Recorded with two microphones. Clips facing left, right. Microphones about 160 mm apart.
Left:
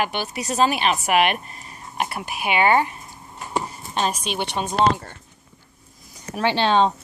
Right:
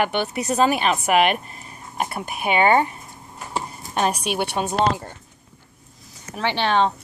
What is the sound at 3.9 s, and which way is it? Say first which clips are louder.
Speech: right 2 dB; 60° right (ahead or behind).